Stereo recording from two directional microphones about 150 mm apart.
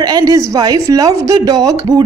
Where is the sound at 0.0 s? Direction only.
25° right (ahead or behind).